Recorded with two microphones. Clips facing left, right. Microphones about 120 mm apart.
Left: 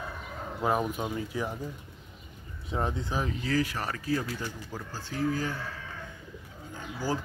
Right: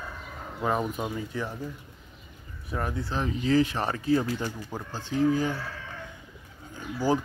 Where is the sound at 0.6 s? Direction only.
5° left (ahead or behind).